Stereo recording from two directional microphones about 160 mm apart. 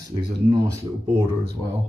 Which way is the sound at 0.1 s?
35° right (ahead or behind).